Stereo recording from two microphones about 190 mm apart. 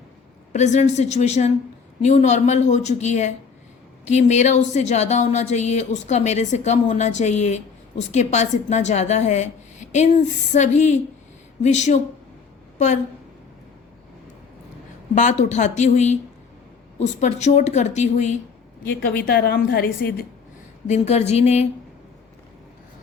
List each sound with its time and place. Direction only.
0.5 s a woman's voice: 40° left (ahead or behind)
15.1 s a woman's voice: 40° left (ahead or behind)
19.0 s a woman's voice: 50° left (ahead or behind)
20.8 s a woman's voice: 35° left (ahead or behind)